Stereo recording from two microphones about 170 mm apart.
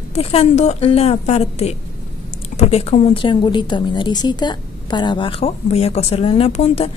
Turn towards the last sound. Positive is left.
turn(degrees=35)  # may be behind; listen again after turning